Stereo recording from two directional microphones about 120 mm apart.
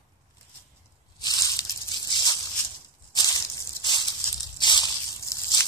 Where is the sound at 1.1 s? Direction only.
35° left (ahead or behind).